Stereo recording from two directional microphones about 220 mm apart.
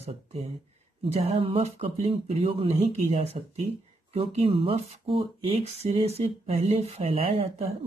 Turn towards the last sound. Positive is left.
turn(degrees=-30)  # may be behind; listen again after turning